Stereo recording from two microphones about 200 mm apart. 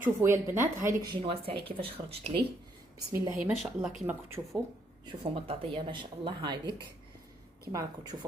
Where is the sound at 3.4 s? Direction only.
5° right (ahead or behind).